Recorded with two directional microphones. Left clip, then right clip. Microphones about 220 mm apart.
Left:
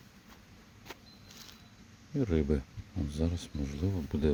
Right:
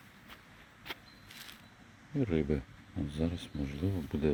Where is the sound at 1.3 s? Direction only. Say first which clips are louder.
Right 3 dB; 15° left (ahead or behind).